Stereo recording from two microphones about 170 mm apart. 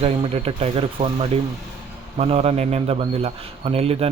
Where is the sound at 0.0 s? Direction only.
35° right (ahead or behind).